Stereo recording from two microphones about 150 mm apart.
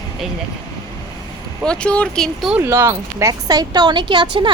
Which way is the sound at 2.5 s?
15° right (ahead or behind).